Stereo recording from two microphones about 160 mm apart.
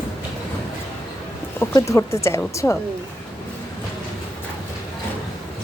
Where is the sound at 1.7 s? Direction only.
20° left (ahead or behind).